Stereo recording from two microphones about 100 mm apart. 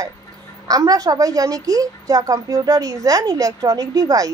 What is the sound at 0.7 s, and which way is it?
A woman's voice, 35° right (ahead or behind).